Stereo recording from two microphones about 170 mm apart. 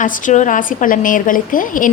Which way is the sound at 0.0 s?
50° left (ahead or behind).